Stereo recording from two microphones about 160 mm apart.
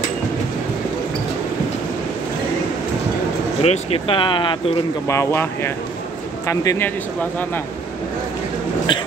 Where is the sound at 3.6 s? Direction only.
35° left (ahead or behind).